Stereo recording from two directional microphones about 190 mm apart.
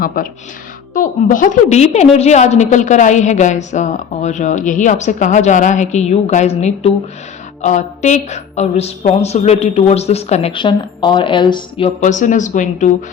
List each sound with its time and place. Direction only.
0.2 s a woman's voice: 45° left (ahead or behind); by 11.9 s 25° left (ahead or behind)
11.9 s a woman's voice: 40° left (ahead or behind)